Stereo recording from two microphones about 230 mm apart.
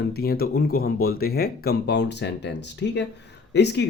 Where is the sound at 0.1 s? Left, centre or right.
Left.